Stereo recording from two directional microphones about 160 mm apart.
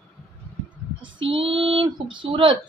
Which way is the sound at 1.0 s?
35° right (ahead or behind).